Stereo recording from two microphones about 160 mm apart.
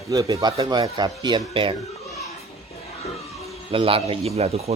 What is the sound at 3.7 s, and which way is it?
A man's voice, 35° right (ahead or behind).